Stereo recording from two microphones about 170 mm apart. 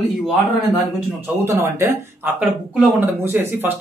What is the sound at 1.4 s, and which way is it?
Speech, 15° right (ahead or behind).